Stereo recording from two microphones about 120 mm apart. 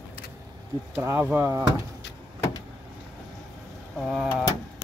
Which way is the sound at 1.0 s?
15° right (ahead or behind).